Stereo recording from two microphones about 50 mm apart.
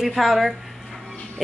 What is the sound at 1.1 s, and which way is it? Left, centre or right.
Music, left.